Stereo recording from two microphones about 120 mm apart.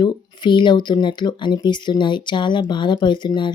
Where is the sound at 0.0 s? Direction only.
40° left (ahead or behind).